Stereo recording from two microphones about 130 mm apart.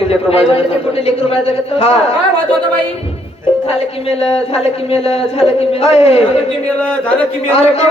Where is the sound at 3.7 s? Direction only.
50° left (ahead or behind).